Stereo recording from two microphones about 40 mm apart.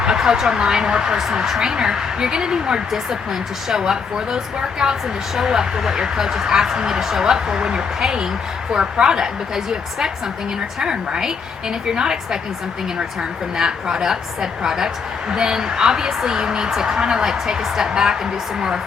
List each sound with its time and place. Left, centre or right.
0.2 s speech: centre
13.6 s speech: centre